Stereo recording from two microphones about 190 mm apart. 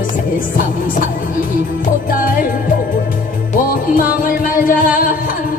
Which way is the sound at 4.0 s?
50° left (ahead or behind).